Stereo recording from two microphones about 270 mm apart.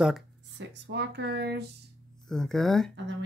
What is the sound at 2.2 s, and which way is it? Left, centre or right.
Speech, centre.